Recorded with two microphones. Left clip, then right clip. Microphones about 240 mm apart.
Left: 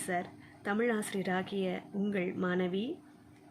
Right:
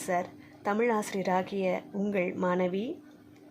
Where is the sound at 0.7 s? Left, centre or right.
Centre.